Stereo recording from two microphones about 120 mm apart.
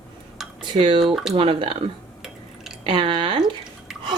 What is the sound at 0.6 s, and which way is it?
Speech, 45° right (ahead or behind).